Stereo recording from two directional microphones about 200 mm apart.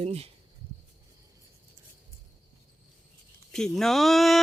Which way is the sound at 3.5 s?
Centre (ahead or behind).